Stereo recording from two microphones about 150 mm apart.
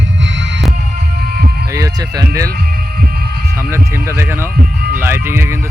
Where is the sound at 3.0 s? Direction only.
90° right.